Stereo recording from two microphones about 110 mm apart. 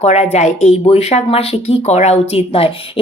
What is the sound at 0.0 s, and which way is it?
A woman's voice, 90° left.